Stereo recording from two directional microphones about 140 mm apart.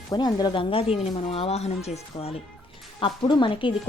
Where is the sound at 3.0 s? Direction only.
35° left (ahead or behind).